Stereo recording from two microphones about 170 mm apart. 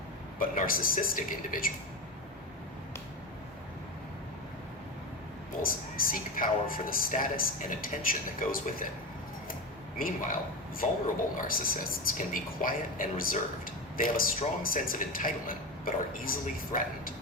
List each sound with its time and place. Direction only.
0.3 s a man's voice: 55° left (ahead or behind)
6.0 s speech: 55° left (ahead or behind)
10.8 s speech: 55° left (ahead or behind)